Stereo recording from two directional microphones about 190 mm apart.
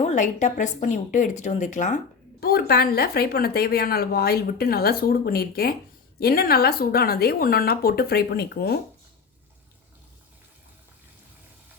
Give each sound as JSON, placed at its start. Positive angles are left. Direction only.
{"t": 0.0, "sound": "speech", "side_deg": 40}
{"t": 2.4, "sound": "a woman's voice", "side_deg": 55}